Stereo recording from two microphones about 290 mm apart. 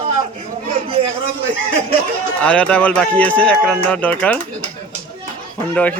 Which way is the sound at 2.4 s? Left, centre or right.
Centre.